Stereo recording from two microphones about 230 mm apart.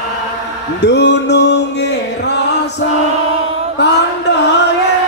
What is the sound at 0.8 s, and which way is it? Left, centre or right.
Music, left.